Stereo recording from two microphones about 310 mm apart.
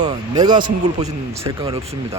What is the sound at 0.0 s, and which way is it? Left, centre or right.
A man's voice, centre.